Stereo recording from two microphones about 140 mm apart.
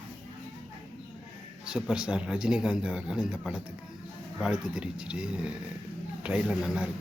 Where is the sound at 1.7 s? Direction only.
5° right (ahead or behind).